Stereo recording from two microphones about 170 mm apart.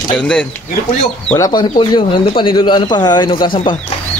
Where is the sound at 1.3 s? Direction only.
20° left (ahead or behind).